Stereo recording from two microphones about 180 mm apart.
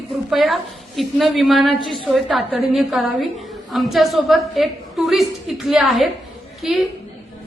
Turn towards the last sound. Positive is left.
turn(degrees=0)  # may be behind; listen again after turning